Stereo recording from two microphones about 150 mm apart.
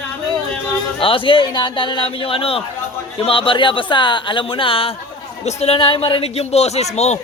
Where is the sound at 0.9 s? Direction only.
35° left (ahead or behind).